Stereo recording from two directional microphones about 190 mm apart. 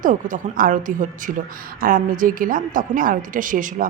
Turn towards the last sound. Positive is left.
turn(degrees=-45)  # may be behind; listen again after turning